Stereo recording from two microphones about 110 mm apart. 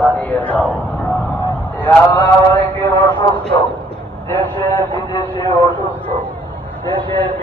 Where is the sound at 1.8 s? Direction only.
15° left (ahead or behind).